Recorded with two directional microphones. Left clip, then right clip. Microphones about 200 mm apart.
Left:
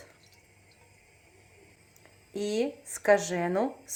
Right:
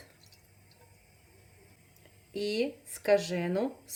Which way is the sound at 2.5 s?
Centre (ahead or behind).